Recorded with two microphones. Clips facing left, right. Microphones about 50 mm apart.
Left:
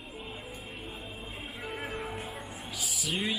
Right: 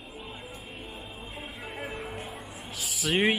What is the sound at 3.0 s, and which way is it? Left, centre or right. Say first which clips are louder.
Speech: right 8 dB; right.